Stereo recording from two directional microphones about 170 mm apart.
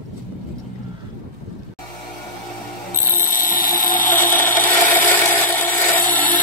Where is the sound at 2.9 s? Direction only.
15° left (ahead or behind).